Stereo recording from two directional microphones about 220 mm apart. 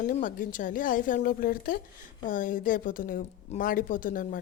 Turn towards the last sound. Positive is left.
turn(degrees=40)  # may be behind; listen again after turning